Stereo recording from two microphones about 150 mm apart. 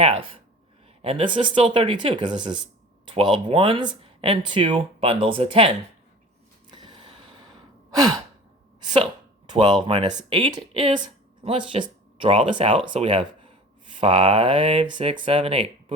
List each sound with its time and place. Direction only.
1.0 s speech: 35° right (ahead or behind)
6.7 s gasp: 30° right (ahead or behind)
7.9 s sigh: 25° right (ahead or behind)
9.5 s speech: 30° right (ahead or behind)